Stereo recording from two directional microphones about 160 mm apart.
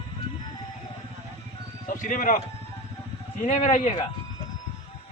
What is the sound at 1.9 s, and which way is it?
Speech, 55° left (ahead or behind).